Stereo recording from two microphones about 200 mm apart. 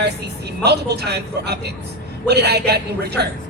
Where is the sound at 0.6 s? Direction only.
55° right (ahead or behind).